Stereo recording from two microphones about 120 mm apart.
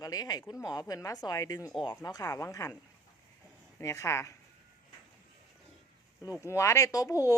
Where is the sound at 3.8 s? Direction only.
25° left (ahead or behind).